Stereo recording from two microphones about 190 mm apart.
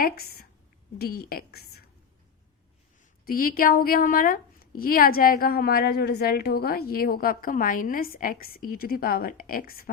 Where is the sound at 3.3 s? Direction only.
50° left (ahead or behind).